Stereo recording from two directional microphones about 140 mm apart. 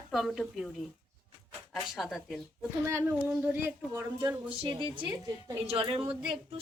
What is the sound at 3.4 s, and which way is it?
Speech, 15° right (ahead or behind).